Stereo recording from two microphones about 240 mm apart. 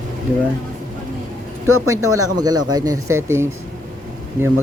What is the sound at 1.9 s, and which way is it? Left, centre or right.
Speech, centre.